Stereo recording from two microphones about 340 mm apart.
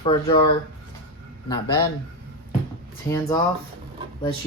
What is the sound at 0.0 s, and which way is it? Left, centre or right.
Speech, centre.